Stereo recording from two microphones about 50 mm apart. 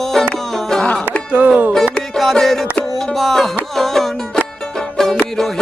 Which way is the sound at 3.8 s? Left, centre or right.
Centre.